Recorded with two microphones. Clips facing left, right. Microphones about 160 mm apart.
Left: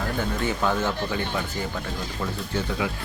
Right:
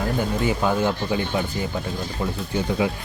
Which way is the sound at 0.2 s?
15° right (ahead or behind).